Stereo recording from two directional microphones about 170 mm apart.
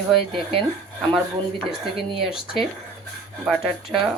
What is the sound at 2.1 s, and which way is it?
Speech, centre (ahead or behind).